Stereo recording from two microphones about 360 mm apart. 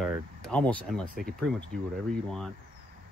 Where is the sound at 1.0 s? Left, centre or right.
Right.